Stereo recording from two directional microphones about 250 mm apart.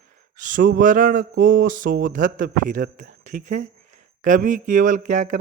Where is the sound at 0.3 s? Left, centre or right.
Right.